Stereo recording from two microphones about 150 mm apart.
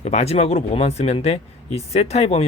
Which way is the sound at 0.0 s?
45° left (ahead or behind).